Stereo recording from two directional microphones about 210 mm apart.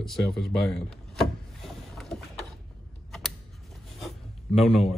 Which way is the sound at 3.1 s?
Centre (ahead or behind).